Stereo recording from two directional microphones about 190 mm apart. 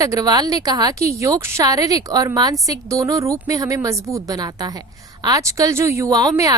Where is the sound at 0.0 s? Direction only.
20° right (ahead or behind).